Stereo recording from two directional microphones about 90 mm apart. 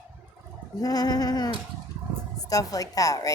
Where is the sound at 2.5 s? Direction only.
40° left (ahead or behind).